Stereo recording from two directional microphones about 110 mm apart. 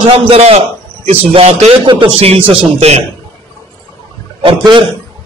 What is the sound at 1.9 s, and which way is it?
Speech, 50° right (ahead or behind).